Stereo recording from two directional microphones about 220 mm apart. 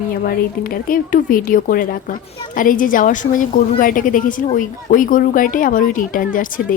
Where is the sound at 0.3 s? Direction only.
40° left (ahead or behind).